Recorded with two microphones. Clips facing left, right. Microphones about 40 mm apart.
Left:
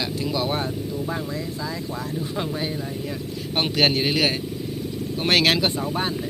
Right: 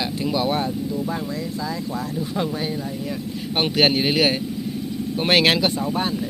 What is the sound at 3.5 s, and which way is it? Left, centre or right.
Speech, centre.